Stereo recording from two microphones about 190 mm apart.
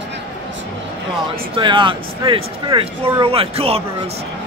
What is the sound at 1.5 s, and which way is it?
Speech, 25° right (ahead or behind).